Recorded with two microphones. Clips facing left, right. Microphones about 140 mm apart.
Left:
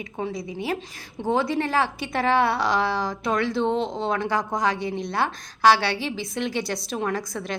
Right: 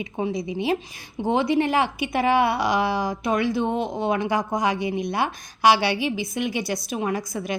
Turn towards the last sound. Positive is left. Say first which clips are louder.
# right 2 dB
turn(degrees=-10)  # may be behind; listen again after turning